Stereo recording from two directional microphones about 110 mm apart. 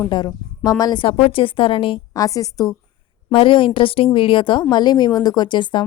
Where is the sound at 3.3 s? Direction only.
50° left (ahead or behind).